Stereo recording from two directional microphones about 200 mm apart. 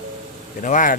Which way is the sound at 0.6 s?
40° left (ahead or behind).